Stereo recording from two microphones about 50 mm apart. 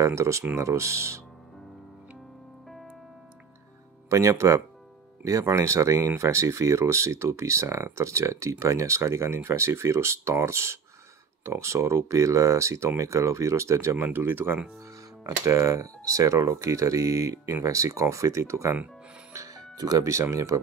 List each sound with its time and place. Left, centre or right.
0.0 s speech: right
4.1 s speech: right
14.0 s speech: right
15.4 s speech: right
19.3 s music: right
20.0 s speech: right